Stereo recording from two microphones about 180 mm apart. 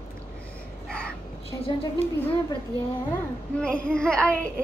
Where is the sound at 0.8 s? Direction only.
5° left (ahead or behind).